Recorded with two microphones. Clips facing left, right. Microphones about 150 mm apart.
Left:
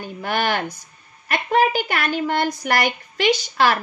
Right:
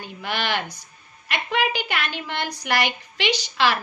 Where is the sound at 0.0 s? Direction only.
45° left (ahead or behind).